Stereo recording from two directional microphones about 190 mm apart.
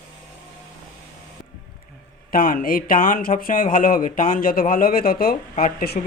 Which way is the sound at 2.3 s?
45° left (ahead or behind).